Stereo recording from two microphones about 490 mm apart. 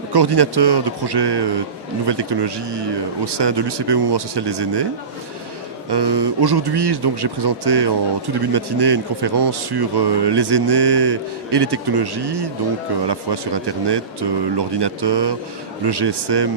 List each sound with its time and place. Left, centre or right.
0.1 s a man's voice: right
5.9 s a man's voice: right